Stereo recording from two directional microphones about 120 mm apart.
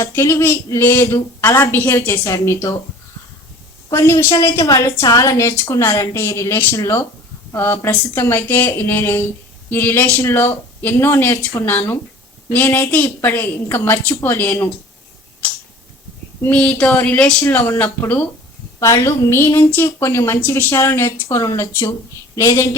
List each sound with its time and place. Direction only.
0.0 s a woman's voice: 25° left (ahead or behind)
3.8 s a woman's voice: 25° left (ahead or behind)
16.4 s a woman's voice: 10° left (ahead or behind)